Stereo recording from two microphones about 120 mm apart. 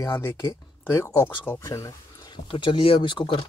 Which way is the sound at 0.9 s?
20° left (ahead or behind).